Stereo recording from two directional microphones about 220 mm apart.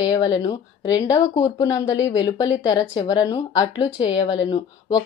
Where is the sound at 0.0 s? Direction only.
20° left (ahead or behind).